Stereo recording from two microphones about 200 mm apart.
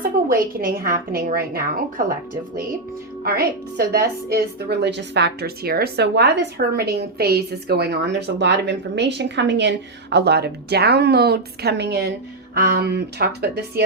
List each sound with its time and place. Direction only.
0.0 s a woman's voice: 45° right (ahead or behind)
3.2 s a woman's voice: 50° right (ahead or behind)